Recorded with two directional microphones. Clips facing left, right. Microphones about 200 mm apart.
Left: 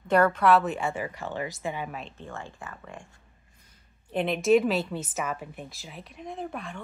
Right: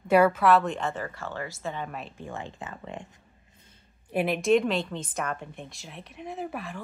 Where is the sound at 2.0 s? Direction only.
10° right (ahead or behind).